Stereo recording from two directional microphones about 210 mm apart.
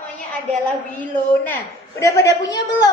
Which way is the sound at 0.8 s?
10° left (ahead or behind).